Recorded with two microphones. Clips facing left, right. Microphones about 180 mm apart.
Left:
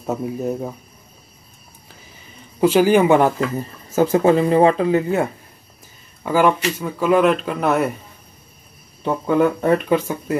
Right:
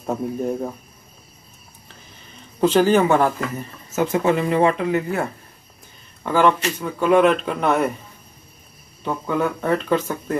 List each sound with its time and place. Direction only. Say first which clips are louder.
0.0 s speech: left 1 dB; 5° left (ahead or behind)
2.6 s speech: left 2 dB; 10° left (ahead or behind)
3.5 s speech: left 5 dB; 35° left (ahead or behind)
6.2 s speech: left 1 dB; 10° left (ahead or behind)
9.4 s speech: left 5 dB; 20° left (ahead or behind)